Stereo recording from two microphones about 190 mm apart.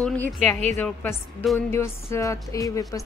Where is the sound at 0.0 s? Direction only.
5° left (ahead or behind).